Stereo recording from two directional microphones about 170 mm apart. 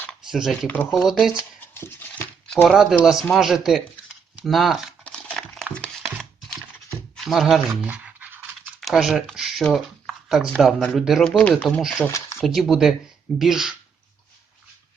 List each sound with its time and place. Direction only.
0.3 s speech: 5° right (ahead or behind)
1.4 s speech: 15° left (ahead or behind); by 3.8 s centre (ahead or behind)
4.4 s crumpling: centre (ahead or behind)
5.7 s a sound: 5° left (ahead or behind)
7.3 s scratch: centre (ahead or behind)
10.2 s speech: centre (ahead or behind)
12.0 s a sound: 15° left (ahead or behind)
12.4 s speech: centre (ahead or behind)